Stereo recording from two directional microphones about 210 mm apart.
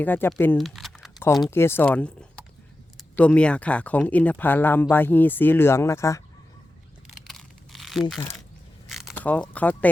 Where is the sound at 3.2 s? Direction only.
5° left (ahead or behind).